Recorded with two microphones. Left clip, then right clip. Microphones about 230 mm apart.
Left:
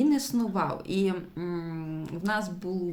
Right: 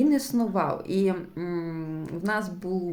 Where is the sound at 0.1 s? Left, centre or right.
Centre.